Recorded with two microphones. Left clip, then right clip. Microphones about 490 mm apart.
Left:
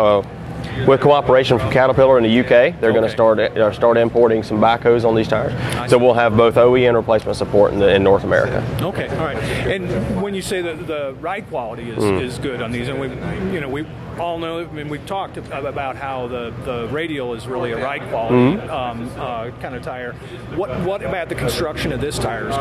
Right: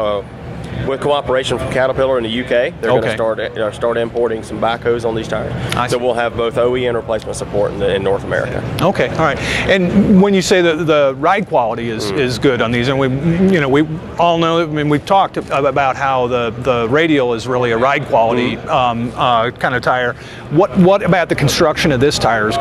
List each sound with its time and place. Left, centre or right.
0.8 s speech: left
8.8 s speech: right